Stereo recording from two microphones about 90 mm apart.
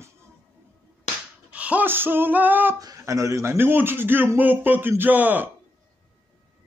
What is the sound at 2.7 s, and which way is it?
Speech, 40° right (ahead or behind).